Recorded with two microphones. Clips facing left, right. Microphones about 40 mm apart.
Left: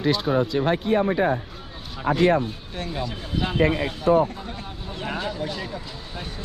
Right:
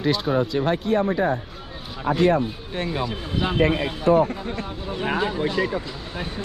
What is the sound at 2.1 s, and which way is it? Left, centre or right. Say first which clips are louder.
Speech: even; left.